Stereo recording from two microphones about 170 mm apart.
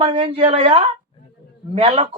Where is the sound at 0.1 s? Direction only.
30° right (ahead or behind).